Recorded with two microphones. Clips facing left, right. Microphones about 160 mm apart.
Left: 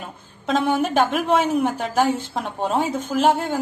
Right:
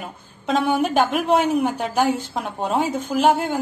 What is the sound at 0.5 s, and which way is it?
A woman's voice, centre (ahead or behind).